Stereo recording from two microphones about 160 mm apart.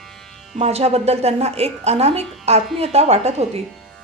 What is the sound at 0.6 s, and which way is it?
A woman's voice, 40° right (ahead or behind).